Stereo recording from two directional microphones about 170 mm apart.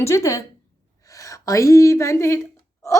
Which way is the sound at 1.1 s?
20° left (ahead or behind).